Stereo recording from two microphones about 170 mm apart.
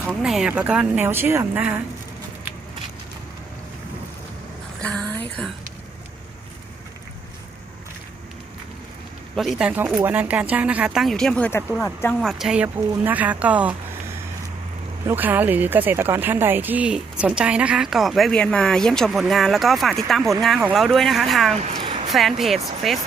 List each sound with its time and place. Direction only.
0.2 s a woman's voice: 5° right (ahead or behind)
4.8 s a woman's voice: 5° left (ahead or behind)
9.3 s a woman's voice: centre (ahead or behind)
12.2 s a woman's voice: centre (ahead or behind)
15.0 s speech: 10° right (ahead or behind)
21.5 s a woman's voice: 40° right (ahead or behind)
21.8 s a sound: 30° right (ahead or behind)
22.1 s speech: centre (ahead or behind)